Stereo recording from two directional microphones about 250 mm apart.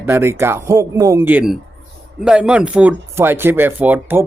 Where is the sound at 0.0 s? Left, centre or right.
Centre.